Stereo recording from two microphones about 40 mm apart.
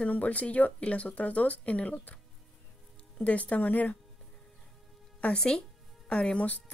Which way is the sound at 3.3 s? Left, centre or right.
Left.